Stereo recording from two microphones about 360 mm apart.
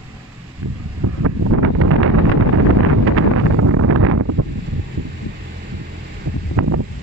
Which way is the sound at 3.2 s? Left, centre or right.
Right.